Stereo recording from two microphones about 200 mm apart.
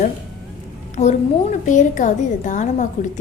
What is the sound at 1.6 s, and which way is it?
A woman's voice, 40° left (ahead or behind).